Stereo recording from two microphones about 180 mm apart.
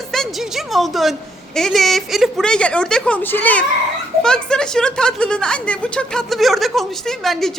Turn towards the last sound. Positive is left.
turn(degrees=0)  # may be behind; listen again after turning